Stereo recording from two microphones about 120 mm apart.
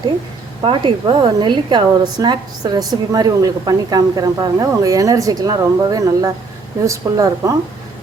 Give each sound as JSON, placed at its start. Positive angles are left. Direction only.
{"t": 0.6, "sound": "a woman's voice", "side_deg": -45}